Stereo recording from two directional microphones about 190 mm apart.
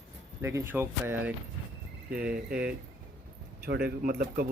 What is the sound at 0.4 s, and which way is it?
Speech, 15° right (ahead or behind).